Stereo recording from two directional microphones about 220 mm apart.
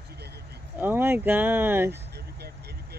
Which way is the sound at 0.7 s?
10° right (ahead or behind).